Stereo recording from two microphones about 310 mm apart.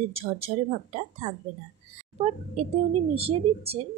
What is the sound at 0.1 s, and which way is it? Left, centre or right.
A woman's voice, centre.